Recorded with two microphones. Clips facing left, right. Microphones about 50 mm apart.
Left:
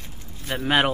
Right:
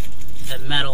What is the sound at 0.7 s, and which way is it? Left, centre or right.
Speech, left.